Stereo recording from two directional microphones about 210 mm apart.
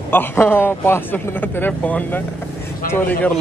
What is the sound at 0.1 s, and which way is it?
Speech, 10° left (ahead or behind).